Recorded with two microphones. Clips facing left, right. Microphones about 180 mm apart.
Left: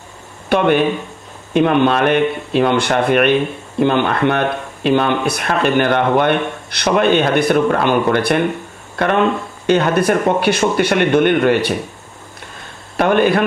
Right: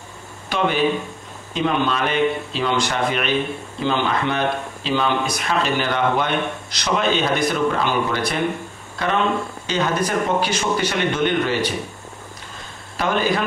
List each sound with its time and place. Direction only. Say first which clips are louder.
0.5 s speech: left 6 dB; 60° left (ahead or behind)
12.9 s speech: left 7 dB; 60° left (ahead or behind)